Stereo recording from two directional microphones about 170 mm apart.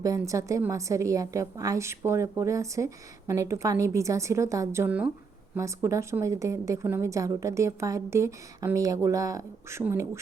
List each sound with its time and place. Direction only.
0.0 s a woman's voice: 20° right (ahead or behind)